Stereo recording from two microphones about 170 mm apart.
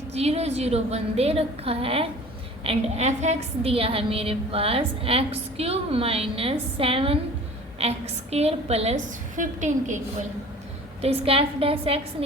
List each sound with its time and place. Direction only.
0.1 s a woman's voice: 40° right (ahead or behind)
11.0 s a woman's voice: 35° right (ahead or behind)